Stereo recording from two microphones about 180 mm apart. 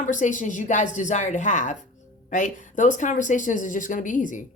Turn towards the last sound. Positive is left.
turn(degrees=45)  # may be behind; listen again after turning